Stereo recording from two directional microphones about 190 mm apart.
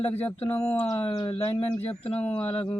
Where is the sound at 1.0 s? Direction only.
25° left (ahead or behind).